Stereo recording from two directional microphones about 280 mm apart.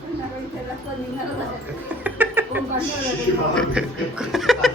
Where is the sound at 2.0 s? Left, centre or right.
Centre.